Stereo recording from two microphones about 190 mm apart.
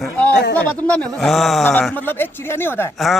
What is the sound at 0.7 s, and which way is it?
Speech, 10° left (ahead or behind).